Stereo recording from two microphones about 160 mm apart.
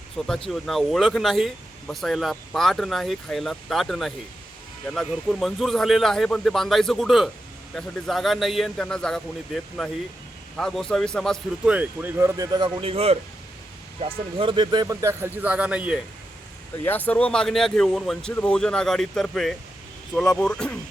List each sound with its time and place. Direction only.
0.3 s a man's voice: 5° left (ahead or behind); by 15.3 s 20° right (ahead or behind)
15.4 s a man's voice: 10° right (ahead or behind)
16.8 s speech: 10° left (ahead or behind)